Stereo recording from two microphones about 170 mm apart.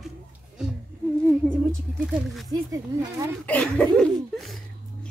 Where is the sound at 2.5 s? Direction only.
20° right (ahead or behind).